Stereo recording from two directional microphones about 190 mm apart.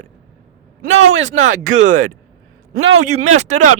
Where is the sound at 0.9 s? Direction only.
80° right.